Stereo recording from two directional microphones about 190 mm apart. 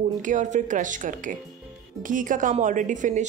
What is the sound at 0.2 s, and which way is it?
A woman's voice, 40° right (ahead or behind).